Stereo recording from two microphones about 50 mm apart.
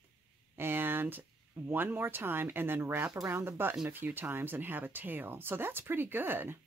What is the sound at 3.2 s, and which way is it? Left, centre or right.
Speech, right.